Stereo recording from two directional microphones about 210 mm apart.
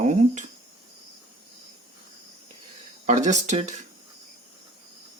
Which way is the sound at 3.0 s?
35° right (ahead or behind).